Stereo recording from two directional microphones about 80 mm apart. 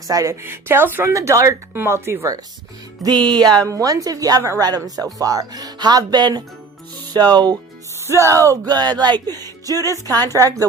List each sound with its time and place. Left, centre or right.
0.1 s a woman's voice: right
0.4 s speech: right
1.1 s speech: right
1.7 s speech: right
3.0 s speech: right
3.6 s a woman's voice: right
8.0 s speech: right
8.6 s a woman's voice: right